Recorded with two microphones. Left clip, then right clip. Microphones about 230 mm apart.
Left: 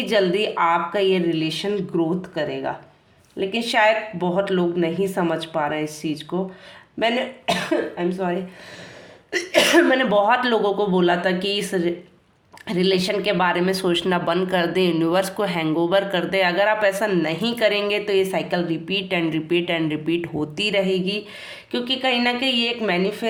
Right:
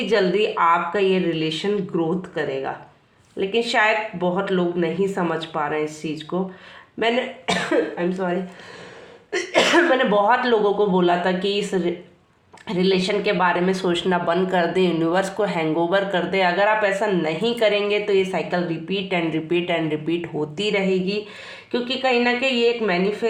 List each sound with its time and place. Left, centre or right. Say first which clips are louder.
0.1 s speech: even; left
3.7 s speech: left 4 dB; left
7.9 s speech: even; left